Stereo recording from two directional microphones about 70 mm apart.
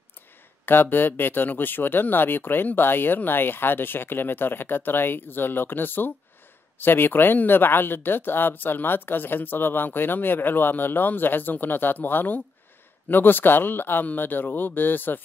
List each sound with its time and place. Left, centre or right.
0.7 s speech: left